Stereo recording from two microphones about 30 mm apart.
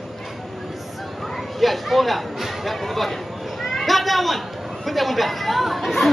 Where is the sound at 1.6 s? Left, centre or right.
Centre.